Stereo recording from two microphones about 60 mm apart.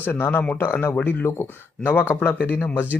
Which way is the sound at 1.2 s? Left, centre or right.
Left.